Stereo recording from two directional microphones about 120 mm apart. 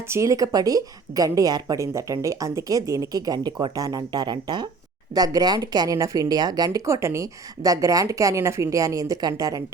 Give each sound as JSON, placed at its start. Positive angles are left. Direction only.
{"t": 0.1, "sound": "a woman's voice", "side_deg": -25}